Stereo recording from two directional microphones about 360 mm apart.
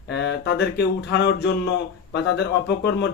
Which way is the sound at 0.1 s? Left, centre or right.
Left.